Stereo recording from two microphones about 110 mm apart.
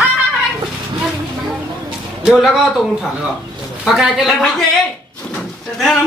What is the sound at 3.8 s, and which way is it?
Speech, centre (ahead or behind).